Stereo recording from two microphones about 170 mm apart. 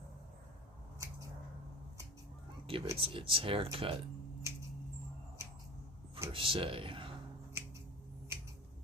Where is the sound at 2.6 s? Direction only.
30° right (ahead or behind).